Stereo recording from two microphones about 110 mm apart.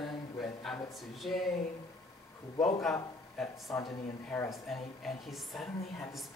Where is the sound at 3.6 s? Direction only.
35° left (ahead or behind).